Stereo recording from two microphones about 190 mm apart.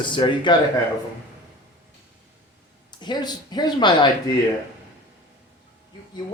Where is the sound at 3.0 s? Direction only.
25° left (ahead or behind).